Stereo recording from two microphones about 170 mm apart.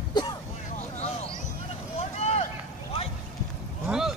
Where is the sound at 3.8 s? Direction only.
5° right (ahead or behind).